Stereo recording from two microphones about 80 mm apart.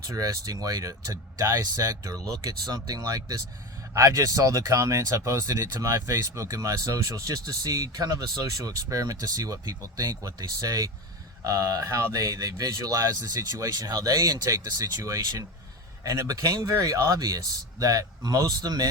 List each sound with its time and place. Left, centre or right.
0.1 s speech: right